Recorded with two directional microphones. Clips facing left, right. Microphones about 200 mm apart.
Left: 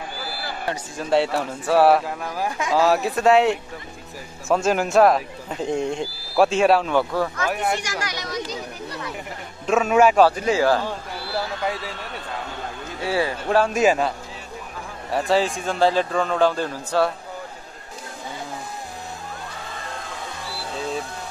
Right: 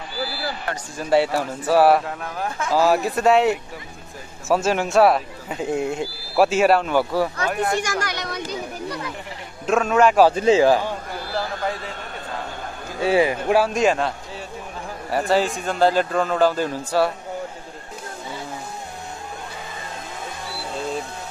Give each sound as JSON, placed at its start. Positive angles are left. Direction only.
{"t": 0.2, "sound": "a sound", "side_deg": 50}
{"t": 0.9, "sound": "speech", "side_deg": 0}
{"t": 7.8, "sound": "speech", "side_deg": -55}
{"t": 9.7, "sound": "speech", "side_deg": 5}
{"t": 10.3, "sound": "speech", "side_deg": -25}
{"t": 13.0, "sound": "speech", "side_deg": -20}
{"t": 13.7, "sound": "speech", "side_deg": 5}
{"t": 20.4, "sound": "music", "side_deg": 0}